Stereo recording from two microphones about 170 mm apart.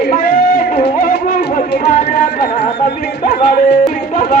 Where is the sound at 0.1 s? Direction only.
55° left (ahead or behind).